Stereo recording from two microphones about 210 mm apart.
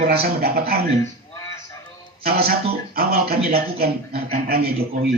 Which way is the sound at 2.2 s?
45° right (ahead or behind).